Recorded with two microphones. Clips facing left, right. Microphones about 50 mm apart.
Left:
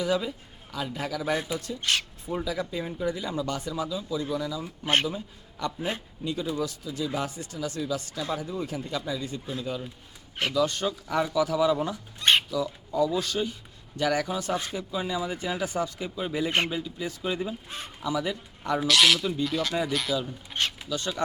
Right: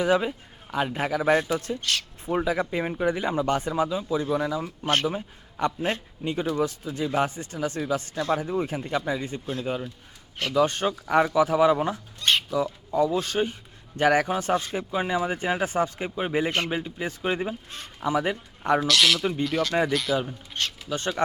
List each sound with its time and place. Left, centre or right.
0.0 s speech: right
1.8 s speech: left
2.2 s a man's voice: right
10.5 s speech: right
12.2 s squawk: left
12.5 s speech: right
17.7 s speech: centre
18.0 s speech: right
18.8 s speech: centre
19.2 s speech: right
19.5 s speech: centre
20.9 s speech: right